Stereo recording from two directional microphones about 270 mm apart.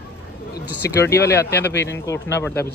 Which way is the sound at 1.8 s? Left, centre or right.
Centre.